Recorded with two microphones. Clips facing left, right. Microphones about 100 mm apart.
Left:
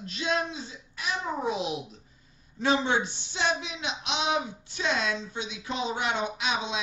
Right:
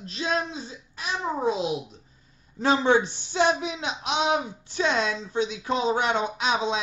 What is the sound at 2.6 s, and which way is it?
Speech, 45° right (ahead or behind).